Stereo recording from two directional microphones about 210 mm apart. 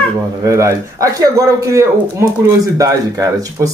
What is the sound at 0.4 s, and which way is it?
Speech, 15° right (ahead or behind).